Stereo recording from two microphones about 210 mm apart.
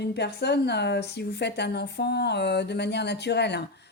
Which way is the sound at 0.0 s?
50° left (ahead or behind).